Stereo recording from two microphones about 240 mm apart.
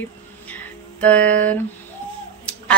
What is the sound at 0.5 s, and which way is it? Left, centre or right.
Music, centre.